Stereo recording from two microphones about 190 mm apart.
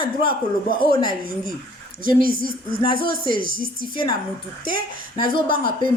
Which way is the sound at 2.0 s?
45° right (ahead or behind).